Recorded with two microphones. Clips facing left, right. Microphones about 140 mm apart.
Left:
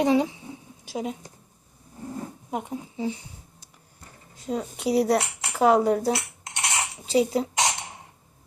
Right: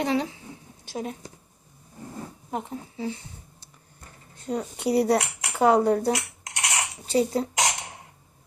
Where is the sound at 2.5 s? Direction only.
15° left (ahead or behind).